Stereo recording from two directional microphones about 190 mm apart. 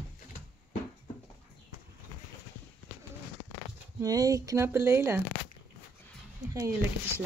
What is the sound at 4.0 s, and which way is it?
Speech, 20° right (ahead or behind).